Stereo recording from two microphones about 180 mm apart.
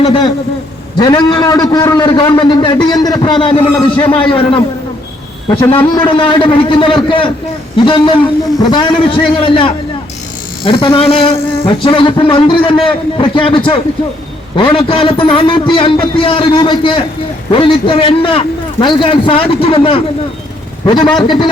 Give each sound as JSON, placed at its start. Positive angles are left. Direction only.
{"t": 0.0, "sound": "a man's voice", "side_deg": 30}
{"t": 5.7, "sound": "a man's voice", "side_deg": 30}